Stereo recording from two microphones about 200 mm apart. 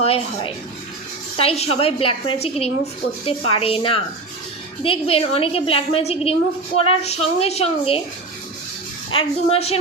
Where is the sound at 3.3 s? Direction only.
25° left (ahead or behind).